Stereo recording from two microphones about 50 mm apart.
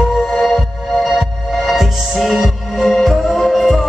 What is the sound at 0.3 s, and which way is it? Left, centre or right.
Music, centre.